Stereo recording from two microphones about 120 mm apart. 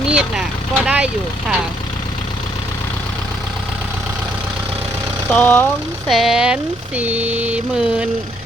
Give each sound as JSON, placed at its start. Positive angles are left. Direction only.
{"t": 0.1, "sound": "vehicle", "side_deg": -10}
{"t": 5.3, "sound": "speech", "side_deg": 15}
{"t": 6.1, "sound": "a sound", "side_deg": 0}